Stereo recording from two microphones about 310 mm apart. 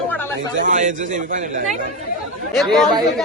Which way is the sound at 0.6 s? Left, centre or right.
Right.